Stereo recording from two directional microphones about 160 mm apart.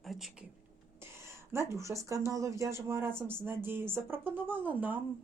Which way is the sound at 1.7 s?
20° right (ahead or behind).